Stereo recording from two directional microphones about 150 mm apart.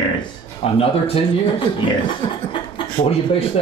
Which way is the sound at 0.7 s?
40° left (ahead or behind).